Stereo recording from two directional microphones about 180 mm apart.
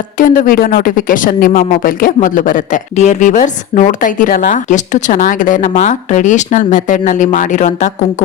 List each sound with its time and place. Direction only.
0.2 s speech: 50° left (ahead or behind)